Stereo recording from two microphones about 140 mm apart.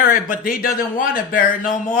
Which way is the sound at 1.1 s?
80° left.